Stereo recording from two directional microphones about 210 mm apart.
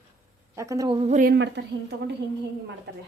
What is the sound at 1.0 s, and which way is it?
Speech, 35° right (ahead or behind).